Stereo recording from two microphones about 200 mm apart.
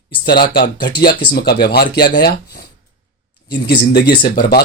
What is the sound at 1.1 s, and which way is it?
Speech, 55° left (ahead or behind).